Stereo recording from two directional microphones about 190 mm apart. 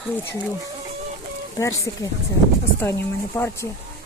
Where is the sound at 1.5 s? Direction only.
15° left (ahead or behind).